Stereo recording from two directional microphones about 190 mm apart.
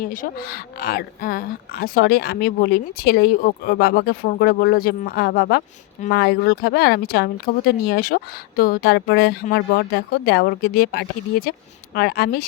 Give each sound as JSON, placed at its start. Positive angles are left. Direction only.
{"t": 0.0, "sound": "speech", "side_deg": 45}